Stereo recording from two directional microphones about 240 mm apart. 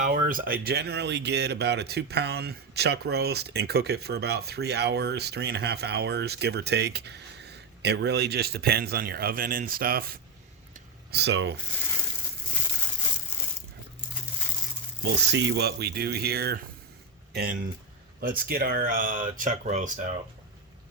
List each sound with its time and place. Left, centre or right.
0.0 s speech: right
10.8 s a sound: right
15.0 s speech: right